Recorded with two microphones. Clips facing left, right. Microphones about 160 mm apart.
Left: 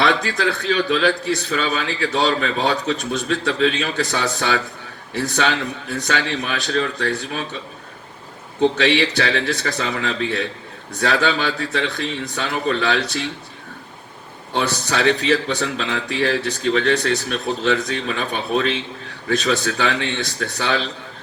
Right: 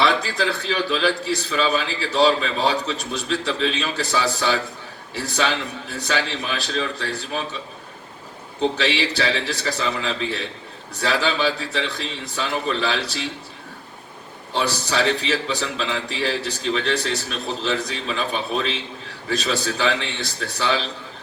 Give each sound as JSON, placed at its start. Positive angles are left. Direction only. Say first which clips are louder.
{"t": 0.0, "sound": "a man's voice", "louder": "left 2 dB", "side_deg": 60}
{"t": 8.8, "sound": "a man's voice", "louder": "left 4 dB", "side_deg": 60}
{"t": 14.5, "sound": "a man's voice", "louder": "left 1 dB", "side_deg": 60}